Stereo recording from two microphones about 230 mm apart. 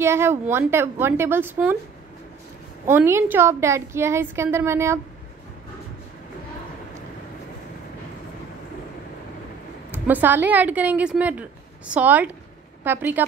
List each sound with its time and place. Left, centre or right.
0.0 s a woman's voice: centre
2.9 s a woman's voice: centre
9.8 s a woman's voice: centre